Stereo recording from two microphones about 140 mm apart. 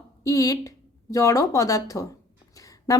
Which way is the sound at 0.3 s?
25° left (ahead or behind).